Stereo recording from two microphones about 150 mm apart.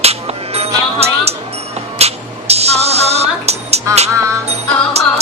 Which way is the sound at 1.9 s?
45° right (ahead or behind).